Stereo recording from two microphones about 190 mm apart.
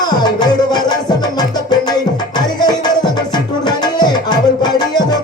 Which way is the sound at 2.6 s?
20° left (ahead or behind).